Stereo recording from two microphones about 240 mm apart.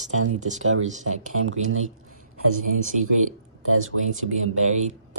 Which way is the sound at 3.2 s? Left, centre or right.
Right.